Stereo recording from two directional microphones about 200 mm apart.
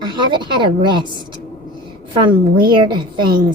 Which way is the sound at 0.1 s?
25° right (ahead or behind).